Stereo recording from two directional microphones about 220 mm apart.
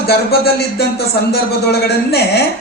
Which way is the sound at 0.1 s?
45° left (ahead or behind).